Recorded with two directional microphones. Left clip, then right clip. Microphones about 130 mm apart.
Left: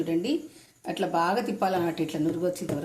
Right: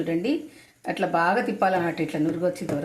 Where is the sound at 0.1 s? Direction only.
25° right (ahead or behind).